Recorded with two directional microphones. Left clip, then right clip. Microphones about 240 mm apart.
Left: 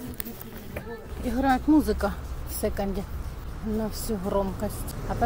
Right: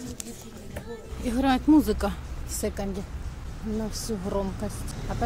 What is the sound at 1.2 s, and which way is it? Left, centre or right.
Speech, centre.